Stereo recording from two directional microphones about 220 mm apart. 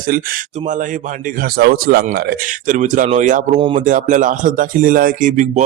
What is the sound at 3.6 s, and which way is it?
Speech, 25° right (ahead or behind).